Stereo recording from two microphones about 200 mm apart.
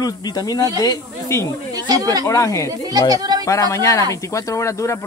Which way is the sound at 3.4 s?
15° left (ahead or behind).